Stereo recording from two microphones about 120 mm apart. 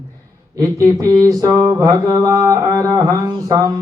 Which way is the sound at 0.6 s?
30° right (ahead or behind).